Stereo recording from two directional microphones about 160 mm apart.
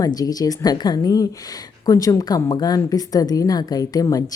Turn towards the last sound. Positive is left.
turn(degrees=25)  # may be behind; listen again after turning